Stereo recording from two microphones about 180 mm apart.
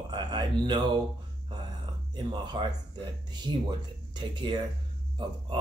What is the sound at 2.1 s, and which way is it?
Speech, 25° right (ahead or behind).